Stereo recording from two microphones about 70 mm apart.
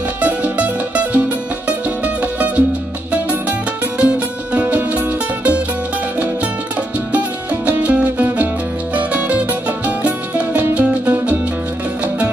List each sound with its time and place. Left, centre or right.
0.2 s music: right
7.6 s music: right